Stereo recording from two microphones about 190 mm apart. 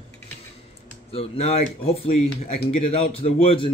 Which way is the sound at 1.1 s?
35° left (ahead or behind).